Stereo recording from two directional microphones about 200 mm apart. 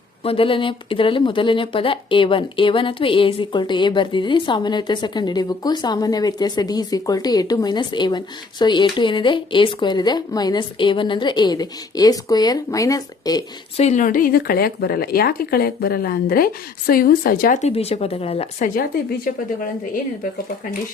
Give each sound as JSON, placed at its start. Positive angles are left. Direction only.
{"t": 0.3, "sound": "speech", "side_deg": 25}
{"t": 13.7, "sound": "speech", "side_deg": 35}